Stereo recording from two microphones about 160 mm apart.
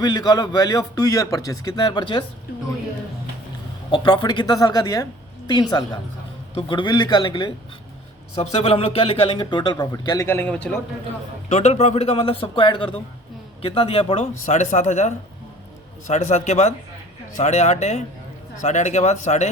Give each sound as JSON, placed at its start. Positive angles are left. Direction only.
{"t": 0.0, "sound": "a man's voice", "side_deg": 25}
{"t": 3.9, "sound": "a man's voice", "side_deg": 30}
{"t": 8.4, "sound": "a man's voice", "side_deg": 40}
{"t": 10.2, "sound": "a man's voice", "side_deg": 10}
{"t": 11.4, "sound": "a man's voice", "side_deg": 45}